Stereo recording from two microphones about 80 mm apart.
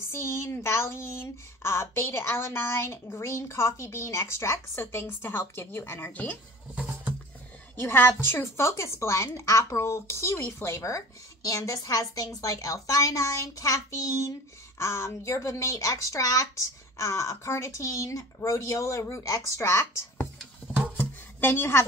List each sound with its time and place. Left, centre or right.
0.1 s a woman's voice: left
6.7 s music: centre
7.8 s a woman's voice: left
21.0 s a sound: left